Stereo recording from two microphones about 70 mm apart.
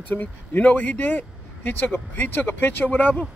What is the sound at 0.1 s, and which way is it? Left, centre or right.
Speech, left.